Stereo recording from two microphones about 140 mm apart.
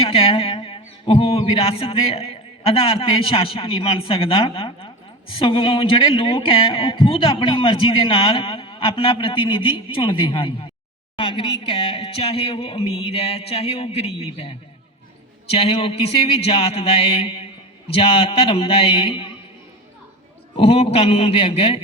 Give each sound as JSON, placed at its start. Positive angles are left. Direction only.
{"t": 0.1, "sound": "speech", "side_deg": 40}
{"t": 20.6, "sound": "speech", "side_deg": 45}